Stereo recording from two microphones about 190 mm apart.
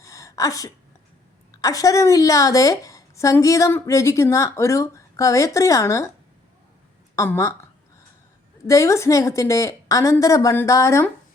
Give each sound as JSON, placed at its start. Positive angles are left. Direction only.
{"t": 0.0, "sound": "a sound", "side_deg": 15}
{"t": 1.6, "sound": "a woman's voice", "side_deg": 20}
{"t": 7.2, "sound": "a woman's voice", "side_deg": 15}
{"t": 8.6, "sound": "a woman's voice", "side_deg": 15}